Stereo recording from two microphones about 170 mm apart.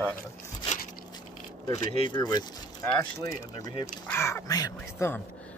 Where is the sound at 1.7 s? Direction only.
35° left (ahead or behind).